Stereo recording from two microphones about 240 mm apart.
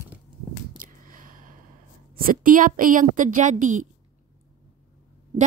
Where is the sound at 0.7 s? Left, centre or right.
Right.